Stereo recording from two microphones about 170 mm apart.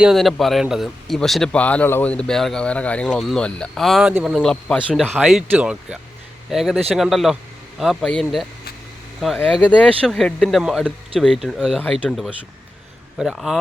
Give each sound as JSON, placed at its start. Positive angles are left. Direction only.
{"t": 0.0, "sound": "speech", "side_deg": 0}